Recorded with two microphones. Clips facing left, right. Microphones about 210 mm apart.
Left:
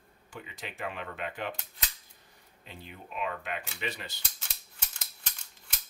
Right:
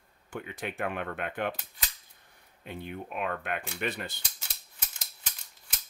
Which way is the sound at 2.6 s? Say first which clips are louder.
Right 9 dB; 60° right (ahead or behind).